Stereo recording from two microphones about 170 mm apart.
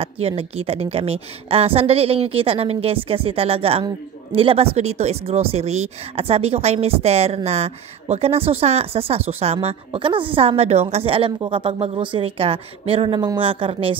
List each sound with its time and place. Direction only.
0.0 s speech: 35° right (ahead or behind)